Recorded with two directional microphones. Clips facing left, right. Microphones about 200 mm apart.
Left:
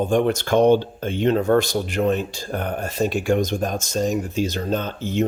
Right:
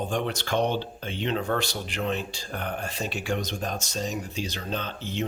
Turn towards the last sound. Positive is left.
turn(degrees=45)  # may be behind; listen again after turning